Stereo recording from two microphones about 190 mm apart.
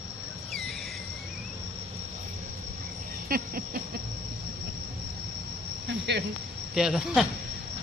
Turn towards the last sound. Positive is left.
turn(degrees=-5)  # may be behind; listen again after turning